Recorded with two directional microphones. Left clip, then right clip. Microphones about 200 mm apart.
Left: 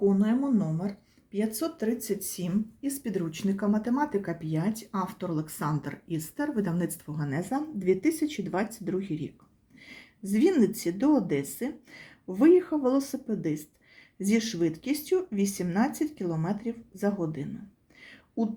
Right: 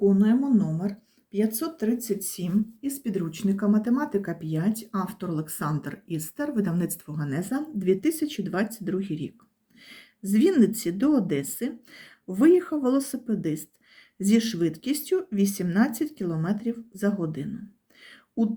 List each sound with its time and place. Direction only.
0.0 s speech: 10° right (ahead or behind)
18.0 s whispering: 20° right (ahead or behind)